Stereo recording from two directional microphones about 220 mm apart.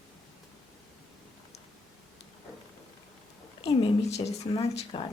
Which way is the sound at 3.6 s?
20° left (ahead or behind).